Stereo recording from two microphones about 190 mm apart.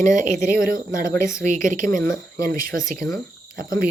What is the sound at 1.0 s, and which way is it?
Speech, 15° left (ahead or behind).